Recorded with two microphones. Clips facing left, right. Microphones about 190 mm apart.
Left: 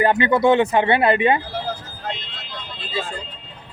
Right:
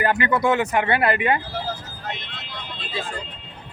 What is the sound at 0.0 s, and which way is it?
Speech, 25° left (ahead or behind).